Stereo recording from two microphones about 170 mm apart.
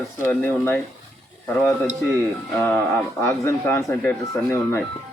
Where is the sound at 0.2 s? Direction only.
15° left (ahead or behind).